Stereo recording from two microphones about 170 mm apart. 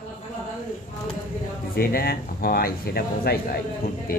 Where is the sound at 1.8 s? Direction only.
65° left (ahead or behind).